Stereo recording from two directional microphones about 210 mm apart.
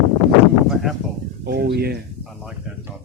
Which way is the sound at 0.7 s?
Centre (ahead or behind).